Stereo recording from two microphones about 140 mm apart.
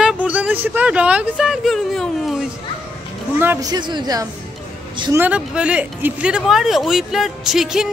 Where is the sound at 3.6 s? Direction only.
30° right (ahead or behind).